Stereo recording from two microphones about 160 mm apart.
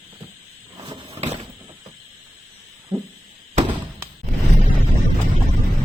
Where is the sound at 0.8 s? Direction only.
40° right (ahead or behind).